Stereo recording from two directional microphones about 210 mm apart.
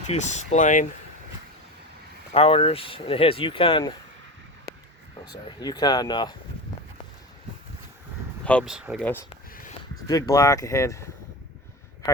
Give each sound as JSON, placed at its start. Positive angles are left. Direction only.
{"t": 0.1, "sound": "speech", "side_deg": 35}
{"t": 2.3, "sound": "speech", "side_deg": 30}
{"t": 4.7, "sound": "a sound", "side_deg": -45}
{"t": 5.2, "sound": "speech", "side_deg": 20}
{"t": 8.4, "sound": "speech", "side_deg": 0}
{"t": 10.1, "sound": "speech", "side_deg": 15}